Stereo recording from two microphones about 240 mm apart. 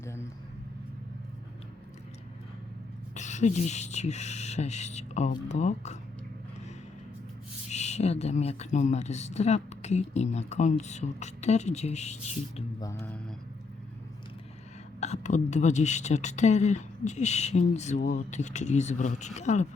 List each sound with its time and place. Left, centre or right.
0.0 s vehicle: centre
3.2 s speech: left
7.7 s speech: left
12.8 s speech: centre
15.0 s speech: left